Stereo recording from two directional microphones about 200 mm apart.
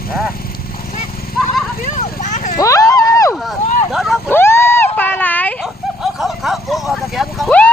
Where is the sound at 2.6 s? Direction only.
15° left (ahead or behind).